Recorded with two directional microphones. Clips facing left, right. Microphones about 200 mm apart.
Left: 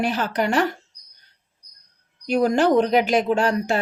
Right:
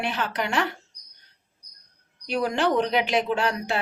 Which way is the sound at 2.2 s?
45° left (ahead or behind).